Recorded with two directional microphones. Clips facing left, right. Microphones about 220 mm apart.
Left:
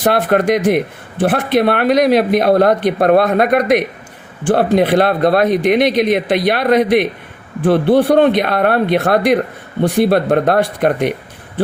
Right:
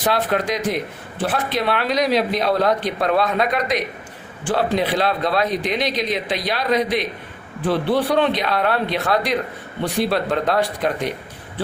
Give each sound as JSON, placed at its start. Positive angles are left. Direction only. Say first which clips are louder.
{"t": 0.0, "sound": "speech", "louder": "left 7 dB", "side_deg": 55}